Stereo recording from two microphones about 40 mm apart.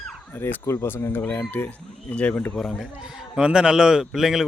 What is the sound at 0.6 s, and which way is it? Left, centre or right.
Speech, left.